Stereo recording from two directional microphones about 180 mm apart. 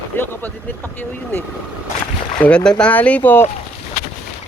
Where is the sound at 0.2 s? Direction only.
10° left (ahead or behind).